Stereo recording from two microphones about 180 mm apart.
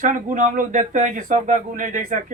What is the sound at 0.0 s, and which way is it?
A man's voice, 45° right (ahead or behind).